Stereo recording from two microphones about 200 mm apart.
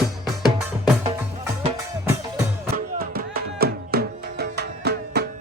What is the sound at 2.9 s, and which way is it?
Music, 50° right (ahead or behind).